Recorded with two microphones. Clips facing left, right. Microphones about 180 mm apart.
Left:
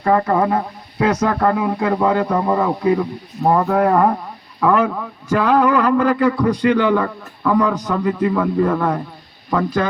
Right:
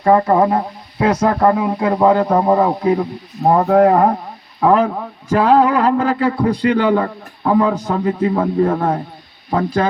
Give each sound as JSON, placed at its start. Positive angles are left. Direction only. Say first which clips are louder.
{"t": 0.0, "sound": "a man's voice", "louder": "right 3 dB", "side_deg": -30}